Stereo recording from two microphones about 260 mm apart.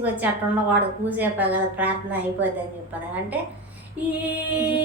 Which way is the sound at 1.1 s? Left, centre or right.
Centre.